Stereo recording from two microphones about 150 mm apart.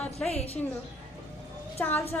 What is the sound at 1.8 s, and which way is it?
Speech, 15° left (ahead or behind).